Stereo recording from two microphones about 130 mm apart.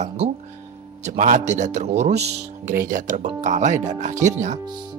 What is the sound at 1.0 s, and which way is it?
Speech, 80° right.